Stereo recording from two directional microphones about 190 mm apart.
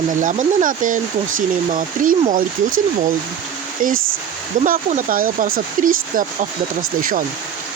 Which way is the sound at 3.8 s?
45° right (ahead or behind).